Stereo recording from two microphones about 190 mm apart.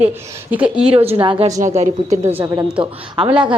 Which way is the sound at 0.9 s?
30° right (ahead or behind).